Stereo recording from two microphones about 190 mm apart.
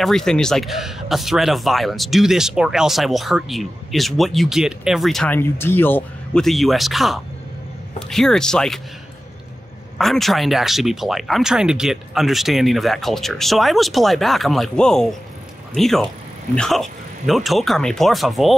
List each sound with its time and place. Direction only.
0.0 s speech: 5° left (ahead or behind)
9.9 s speech: centre (ahead or behind)